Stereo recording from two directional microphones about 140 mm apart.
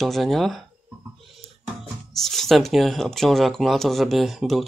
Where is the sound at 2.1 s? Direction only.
Centre (ahead or behind).